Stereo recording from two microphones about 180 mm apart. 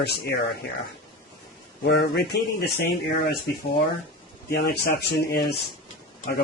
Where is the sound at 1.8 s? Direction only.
65° left (ahead or behind).